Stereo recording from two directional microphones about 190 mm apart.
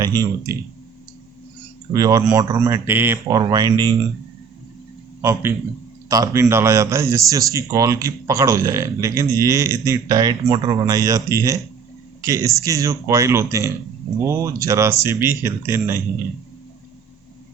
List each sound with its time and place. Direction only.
0.0 s speech: 20° right (ahead or behind)
1.9 s speech: 20° right (ahead or behind)
5.2 s speech: 15° right (ahead or behind)